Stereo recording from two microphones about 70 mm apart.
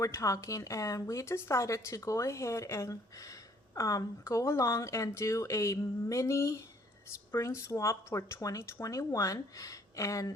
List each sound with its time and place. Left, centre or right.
0.0 s speech: left